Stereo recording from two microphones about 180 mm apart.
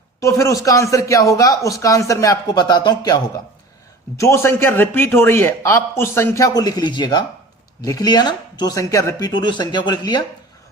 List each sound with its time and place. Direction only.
0.2 s speech: 15° left (ahead or behind)
4.2 s speech: 15° left (ahead or behind)